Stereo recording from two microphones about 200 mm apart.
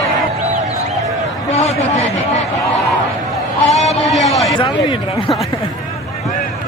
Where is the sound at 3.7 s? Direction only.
30° left (ahead or behind).